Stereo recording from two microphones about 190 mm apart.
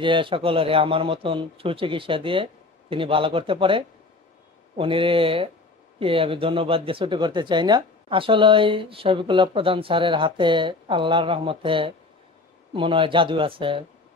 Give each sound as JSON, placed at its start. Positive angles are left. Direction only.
{"t": 0.0, "sound": "speech", "side_deg": -25}